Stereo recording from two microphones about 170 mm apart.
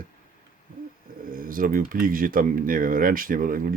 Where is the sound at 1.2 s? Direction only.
55° right (ahead or behind).